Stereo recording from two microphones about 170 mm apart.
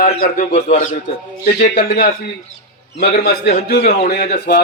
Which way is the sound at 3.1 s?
65° left (ahead or behind).